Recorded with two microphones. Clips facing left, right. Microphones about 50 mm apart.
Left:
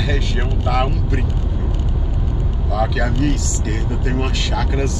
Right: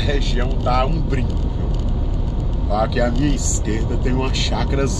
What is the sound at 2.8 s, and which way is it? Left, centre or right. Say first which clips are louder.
Speech: right 2 dB; centre.